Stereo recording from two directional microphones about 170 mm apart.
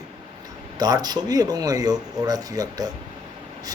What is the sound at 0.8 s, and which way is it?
Speech, 25° right (ahead or behind).